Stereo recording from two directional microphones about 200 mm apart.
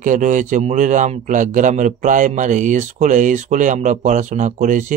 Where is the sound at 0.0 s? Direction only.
40° right (ahead or behind).